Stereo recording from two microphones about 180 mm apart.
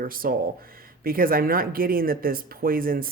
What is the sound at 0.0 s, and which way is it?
Speech, 50° right (ahead or behind).